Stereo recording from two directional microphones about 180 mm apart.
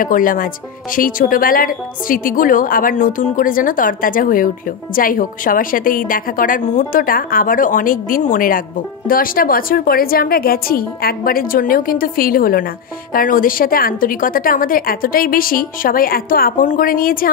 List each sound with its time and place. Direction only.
0.0 s a woman's voice: 50° left (ahead or behind)